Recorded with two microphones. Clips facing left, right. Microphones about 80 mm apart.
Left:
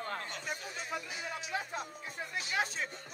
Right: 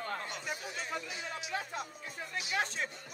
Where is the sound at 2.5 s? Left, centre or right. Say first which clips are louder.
Even; centre.